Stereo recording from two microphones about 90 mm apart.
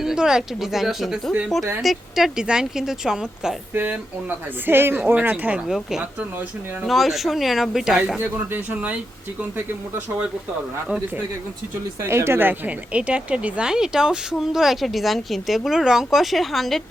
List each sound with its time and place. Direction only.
0.0 s a woman's voice: 5° right (ahead or behind)
4.6 s speech: 25° right (ahead or behind)
5.6 s a woman's voice: 5° right (ahead or behind)
8.2 s speech: 20° right (ahead or behind)
12.0 s a woman's voice: 30° right (ahead or behind); by 16.8 s centre (ahead or behind)